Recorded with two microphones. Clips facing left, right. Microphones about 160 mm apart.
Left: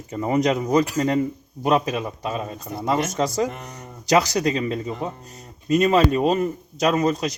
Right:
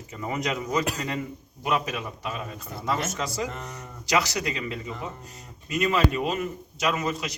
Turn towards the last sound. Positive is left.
turn(degrees=45)  # may be behind; listen again after turning